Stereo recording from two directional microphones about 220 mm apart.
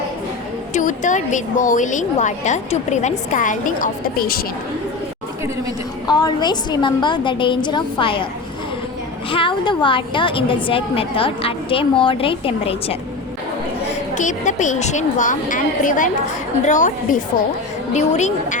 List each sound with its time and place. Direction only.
0.7 s a woman's voice: 35° left (ahead or behind)
6.1 s a woman's voice: 20° left (ahead or behind)
9.3 s a woman's voice: 20° left (ahead or behind)
14.2 s a woman's voice: 35° left (ahead or behind)